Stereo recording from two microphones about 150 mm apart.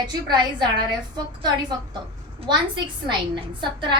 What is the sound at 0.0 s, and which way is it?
A woman's voice, 30° right (ahead or behind).